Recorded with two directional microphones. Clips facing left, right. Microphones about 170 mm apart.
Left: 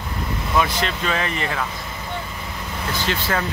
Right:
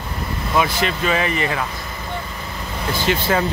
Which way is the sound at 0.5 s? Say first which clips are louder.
Right 2 dB; 5° right (ahead or behind).